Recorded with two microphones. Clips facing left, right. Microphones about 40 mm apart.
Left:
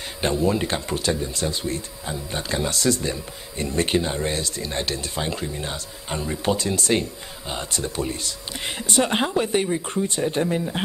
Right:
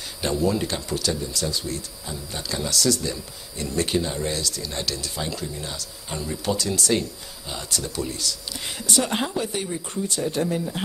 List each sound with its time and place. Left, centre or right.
0.2 s speech: left